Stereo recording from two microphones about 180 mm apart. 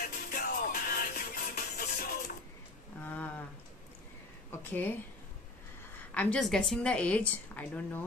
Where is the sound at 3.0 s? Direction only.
10° left (ahead or behind).